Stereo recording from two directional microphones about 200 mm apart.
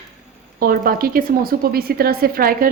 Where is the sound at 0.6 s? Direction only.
45° right (ahead or behind).